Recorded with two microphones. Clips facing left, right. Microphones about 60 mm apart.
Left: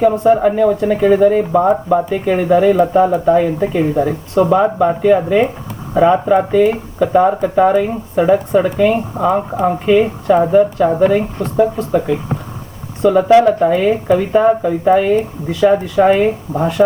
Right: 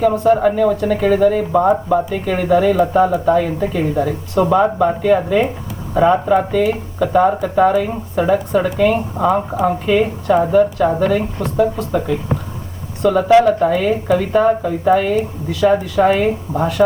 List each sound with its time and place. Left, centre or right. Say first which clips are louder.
0.3 s speech: left 2 dB; centre